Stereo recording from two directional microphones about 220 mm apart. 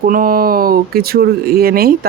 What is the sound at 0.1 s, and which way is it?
Speech, 40° right (ahead or behind).